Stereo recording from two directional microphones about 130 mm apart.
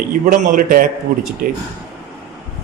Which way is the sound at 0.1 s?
85° right.